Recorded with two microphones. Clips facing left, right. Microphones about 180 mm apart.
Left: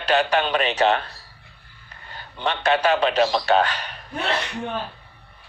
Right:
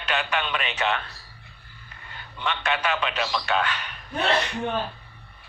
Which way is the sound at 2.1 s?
35° left (ahead or behind).